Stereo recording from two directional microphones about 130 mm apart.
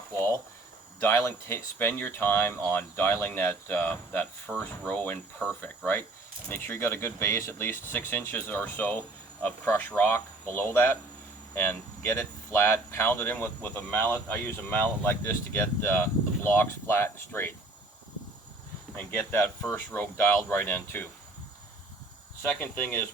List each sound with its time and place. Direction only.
1.0 s speech: 20° left (ahead or behind)
18.9 s speech: 15° left (ahead or behind)
22.4 s speech: 15° left (ahead or behind)